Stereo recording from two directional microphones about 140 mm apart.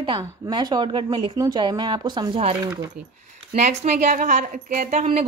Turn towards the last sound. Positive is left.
turn(degrees=-55)  # may be behind; listen again after turning